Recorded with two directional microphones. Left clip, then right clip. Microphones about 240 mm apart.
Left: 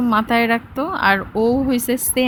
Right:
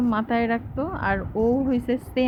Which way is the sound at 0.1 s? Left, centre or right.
Left.